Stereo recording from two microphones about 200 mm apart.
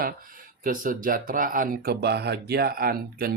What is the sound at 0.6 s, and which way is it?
Speech, 45° right (ahead or behind).